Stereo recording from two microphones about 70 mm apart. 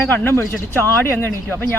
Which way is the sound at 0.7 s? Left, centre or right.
Left.